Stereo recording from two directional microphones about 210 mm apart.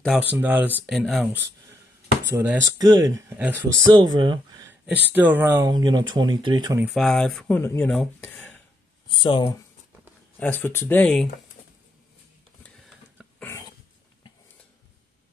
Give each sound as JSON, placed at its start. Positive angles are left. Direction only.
{"t": 0.0, "sound": "speech", "side_deg": -5}
{"t": 2.3, "sound": "speech", "side_deg": -15}
{"t": 3.9, "sound": "speech", "side_deg": -20}
{"t": 5.1, "sound": "speech", "side_deg": -10}
{"t": 6.8, "sound": "speech", "side_deg": 0}
{"t": 9.1, "sound": "speech", "side_deg": 25}
{"t": 10.4, "sound": "speech", "side_deg": 10}
{"t": 12.6, "sound": "a sound", "side_deg": 5}